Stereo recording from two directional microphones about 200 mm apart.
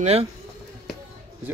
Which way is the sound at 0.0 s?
30° right (ahead or behind).